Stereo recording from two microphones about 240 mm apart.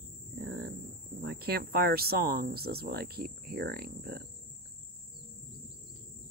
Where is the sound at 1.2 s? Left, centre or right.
Right.